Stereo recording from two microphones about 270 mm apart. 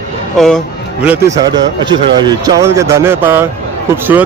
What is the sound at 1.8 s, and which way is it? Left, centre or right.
Speech, centre.